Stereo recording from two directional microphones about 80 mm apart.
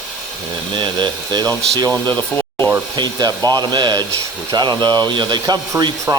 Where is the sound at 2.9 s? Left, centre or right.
Right.